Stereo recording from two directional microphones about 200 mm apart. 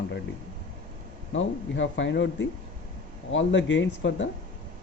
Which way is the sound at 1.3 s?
70° left (ahead or behind).